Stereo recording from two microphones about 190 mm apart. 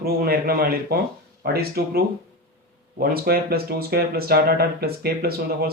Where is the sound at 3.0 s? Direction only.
50° right (ahead or behind).